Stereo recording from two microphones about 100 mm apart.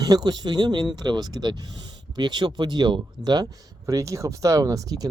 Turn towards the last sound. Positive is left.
turn(degrees=-35)  # may be behind; listen again after turning